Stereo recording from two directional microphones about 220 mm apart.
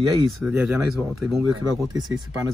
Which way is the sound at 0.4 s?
5° right (ahead or behind).